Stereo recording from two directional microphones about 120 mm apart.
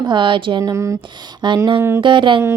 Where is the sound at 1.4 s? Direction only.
40° right (ahead or behind).